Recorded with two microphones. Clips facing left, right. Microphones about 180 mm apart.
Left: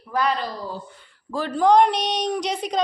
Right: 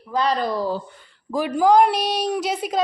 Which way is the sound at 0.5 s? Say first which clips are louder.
Right 9 dB; 85° right.